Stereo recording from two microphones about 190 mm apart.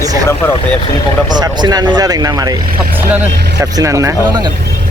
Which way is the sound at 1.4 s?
20° right (ahead or behind).